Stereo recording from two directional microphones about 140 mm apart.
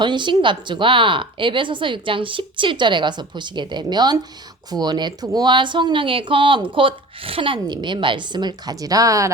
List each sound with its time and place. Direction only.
0.0 s speech: 35° right (ahead or behind)